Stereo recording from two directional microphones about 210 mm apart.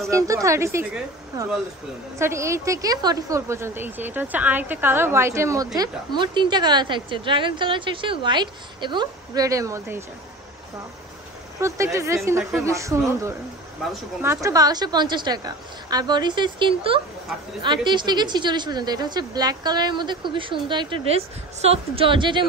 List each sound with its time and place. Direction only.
0.0 s a woman's voice: 15° right (ahead or behind)
11.6 s a woman's voice: 15° right (ahead or behind)
13.8 s speech: 5° right (ahead or behind)
14.2 s a woman's voice: 15° right (ahead or behind)